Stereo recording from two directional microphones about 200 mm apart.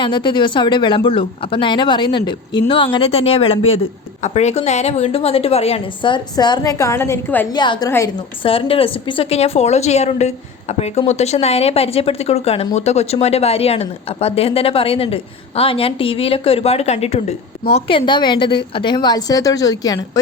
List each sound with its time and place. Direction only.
0.0 s speech: 25° left (ahead or behind)
7.5 s speech: 20° left (ahead or behind)
8.4 s a woman's voice: 30° left (ahead or behind)